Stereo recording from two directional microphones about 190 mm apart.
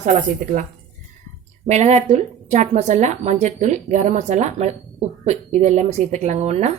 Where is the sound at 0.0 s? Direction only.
40° right (ahead or behind).